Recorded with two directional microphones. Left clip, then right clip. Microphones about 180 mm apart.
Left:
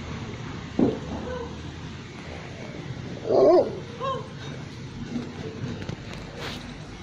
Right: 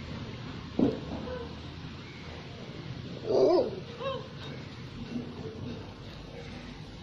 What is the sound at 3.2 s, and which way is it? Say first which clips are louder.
Dog: left 7 dB; 50° right (ahead or behind).